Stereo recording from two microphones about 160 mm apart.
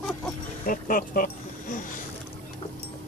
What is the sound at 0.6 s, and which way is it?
Speech, 60° left (ahead or behind).